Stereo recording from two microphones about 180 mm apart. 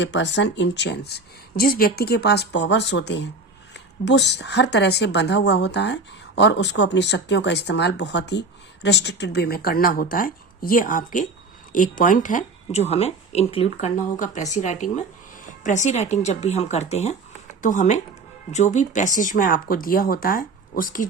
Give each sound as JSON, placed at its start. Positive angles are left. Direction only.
{"t": 0.0, "sound": "a woman's voice", "side_deg": 90}